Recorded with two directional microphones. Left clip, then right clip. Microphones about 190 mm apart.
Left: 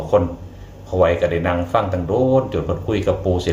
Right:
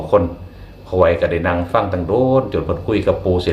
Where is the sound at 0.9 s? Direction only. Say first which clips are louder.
Right 2 dB; 20° right (ahead or behind).